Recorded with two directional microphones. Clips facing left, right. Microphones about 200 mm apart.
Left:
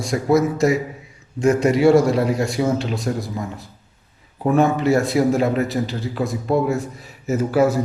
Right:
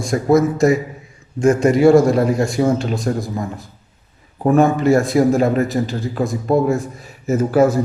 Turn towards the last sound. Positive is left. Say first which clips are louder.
# right 3 dB
turn(degrees=-50)  # may be behind; listen again after turning